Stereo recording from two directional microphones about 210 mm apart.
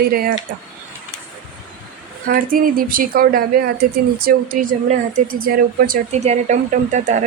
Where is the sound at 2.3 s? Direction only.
45° right (ahead or behind).